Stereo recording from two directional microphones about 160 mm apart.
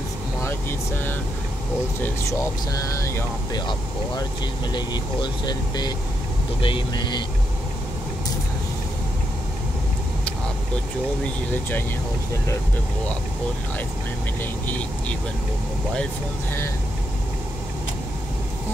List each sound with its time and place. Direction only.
0.4 s speech: 15° left (ahead or behind)
4.7 s speech: 25° left (ahead or behind)
14.4 s speech: 10° left (ahead or behind)